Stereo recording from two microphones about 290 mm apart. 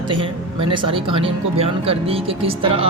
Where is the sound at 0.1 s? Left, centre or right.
Centre.